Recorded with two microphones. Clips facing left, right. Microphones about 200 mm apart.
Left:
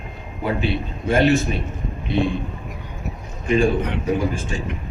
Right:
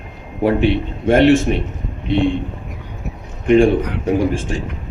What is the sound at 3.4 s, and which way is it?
Speech, 80° right.